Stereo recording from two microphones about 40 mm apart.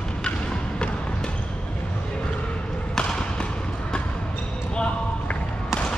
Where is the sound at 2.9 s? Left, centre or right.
Centre.